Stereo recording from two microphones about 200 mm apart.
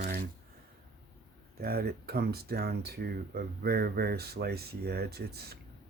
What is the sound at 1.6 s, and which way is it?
Speech, 50° right (ahead or behind).